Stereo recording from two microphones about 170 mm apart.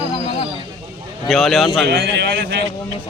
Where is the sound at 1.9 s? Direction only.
85° right.